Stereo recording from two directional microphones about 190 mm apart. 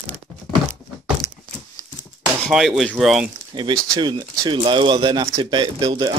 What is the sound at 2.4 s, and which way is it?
Speech, centre (ahead or behind).